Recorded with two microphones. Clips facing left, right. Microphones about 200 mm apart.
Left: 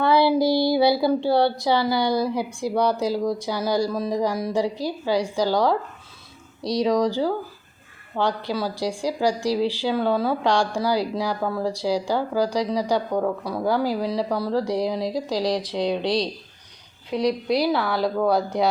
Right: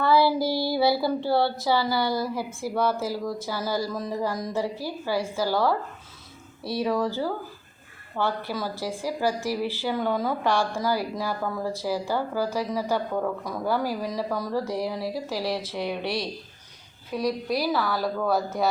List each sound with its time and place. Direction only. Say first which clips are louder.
0.0 s a woman's voice: left 3 dB; 15° left (ahead or behind)
17.1 s a woman's voice: left 4 dB; 75° left (ahead or behind)
17.7 s a woman's voice: left 3 dB; 15° left (ahead or behind)